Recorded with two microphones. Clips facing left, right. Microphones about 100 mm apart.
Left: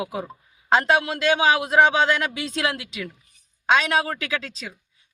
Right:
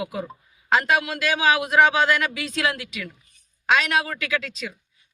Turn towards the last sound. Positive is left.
turn(degrees=30)  # may be behind; listen again after turning